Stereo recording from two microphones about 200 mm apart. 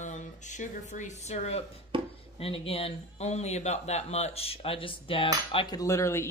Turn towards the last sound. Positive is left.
turn(degrees=15)  # may be behind; listen again after turning